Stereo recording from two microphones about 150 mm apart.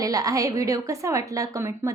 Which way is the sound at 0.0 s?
25° right (ahead or behind).